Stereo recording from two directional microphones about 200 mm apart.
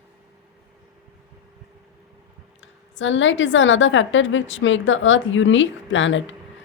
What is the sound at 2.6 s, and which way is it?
A woman's voice, 70° left (ahead or behind).